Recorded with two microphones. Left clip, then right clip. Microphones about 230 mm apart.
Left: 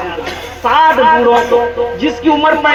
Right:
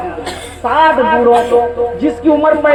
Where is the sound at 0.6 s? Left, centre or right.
Right.